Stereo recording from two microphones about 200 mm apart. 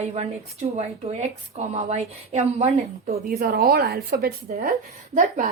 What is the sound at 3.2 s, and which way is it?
Speech, 45° right (ahead or behind).